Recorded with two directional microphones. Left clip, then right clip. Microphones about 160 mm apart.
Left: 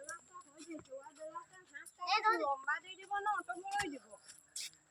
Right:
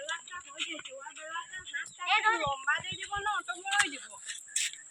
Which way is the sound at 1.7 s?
40° right (ahead or behind).